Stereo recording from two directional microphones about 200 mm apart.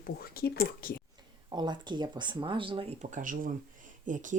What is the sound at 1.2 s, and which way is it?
Speech, 20° right (ahead or behind).